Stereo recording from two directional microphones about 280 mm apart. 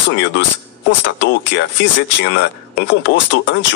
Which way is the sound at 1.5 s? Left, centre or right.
Left.